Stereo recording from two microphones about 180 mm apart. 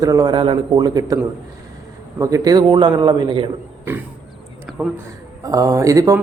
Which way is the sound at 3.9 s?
10° right (ahead or behind).